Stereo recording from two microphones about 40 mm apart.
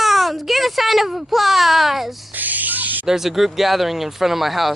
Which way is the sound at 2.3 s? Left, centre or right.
Right.